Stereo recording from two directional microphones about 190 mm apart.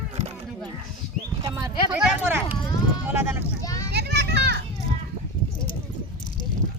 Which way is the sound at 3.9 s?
60° right (ahead or behind).